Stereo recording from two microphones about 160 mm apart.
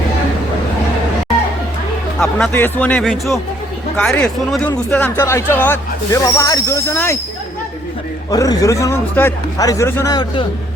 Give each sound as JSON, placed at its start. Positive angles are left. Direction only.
{"t": 2.1, "sound": "speech", "side_deg": 5}
{"t": 8.3, "sound": "a man's voice", "side_deg": 25}